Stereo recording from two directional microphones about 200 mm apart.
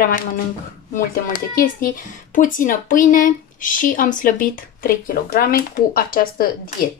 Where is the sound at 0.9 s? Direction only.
40° left (ahead or behind).